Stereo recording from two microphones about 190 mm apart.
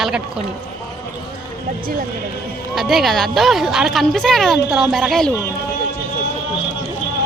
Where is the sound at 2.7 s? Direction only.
Centre (ahead or behind).